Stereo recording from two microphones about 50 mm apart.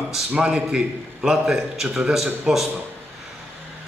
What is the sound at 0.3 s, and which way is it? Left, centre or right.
Speech, right.